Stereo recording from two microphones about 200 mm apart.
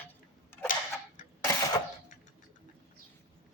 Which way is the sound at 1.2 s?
40° left (ahead or behind).